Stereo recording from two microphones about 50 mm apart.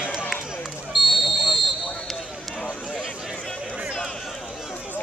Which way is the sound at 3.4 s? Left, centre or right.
Centre.